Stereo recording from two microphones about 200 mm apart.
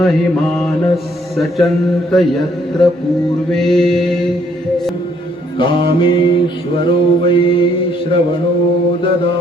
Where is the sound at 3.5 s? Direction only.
Centre (ahead or behind).